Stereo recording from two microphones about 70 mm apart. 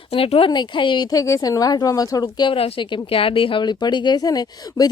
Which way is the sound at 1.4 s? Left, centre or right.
Left.